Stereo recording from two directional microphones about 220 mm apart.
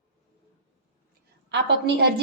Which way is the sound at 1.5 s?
50° right (ahead or behind).